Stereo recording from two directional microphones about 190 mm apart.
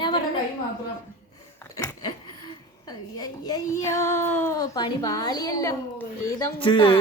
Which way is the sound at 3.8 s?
15° left (ahead or behind).